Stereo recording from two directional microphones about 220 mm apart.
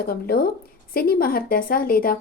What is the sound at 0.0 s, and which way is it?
Speech, 45° left (ahead or behind).